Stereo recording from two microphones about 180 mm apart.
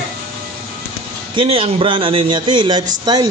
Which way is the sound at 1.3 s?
30° right (ahead or behind).